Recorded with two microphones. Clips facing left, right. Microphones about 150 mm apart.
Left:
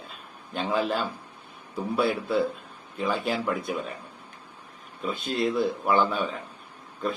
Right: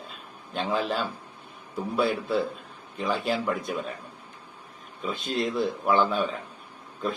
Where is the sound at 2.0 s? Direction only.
5° left (ahead or behind).